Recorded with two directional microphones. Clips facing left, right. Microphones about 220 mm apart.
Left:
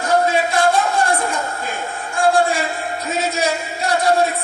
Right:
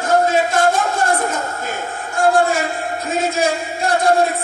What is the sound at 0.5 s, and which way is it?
Speech, 45° right (ahead or behind).